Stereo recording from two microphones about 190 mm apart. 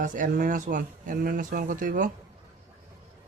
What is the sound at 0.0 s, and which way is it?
Speech, 45° right (ahead or behind).